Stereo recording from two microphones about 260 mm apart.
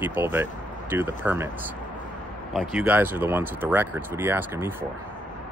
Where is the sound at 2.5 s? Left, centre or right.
Centre.